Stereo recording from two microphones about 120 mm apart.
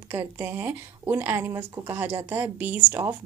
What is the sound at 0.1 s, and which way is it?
Speech, 15° right (ahead or behind).